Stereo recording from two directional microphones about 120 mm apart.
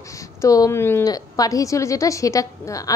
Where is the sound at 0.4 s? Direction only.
25° left (ahead or behind).